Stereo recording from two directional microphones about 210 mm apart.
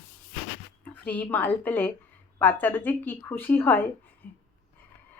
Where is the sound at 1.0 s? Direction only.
10° left (ahead or behind).